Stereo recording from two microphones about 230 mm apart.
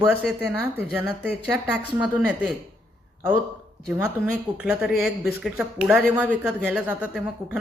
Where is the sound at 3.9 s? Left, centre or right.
Centre.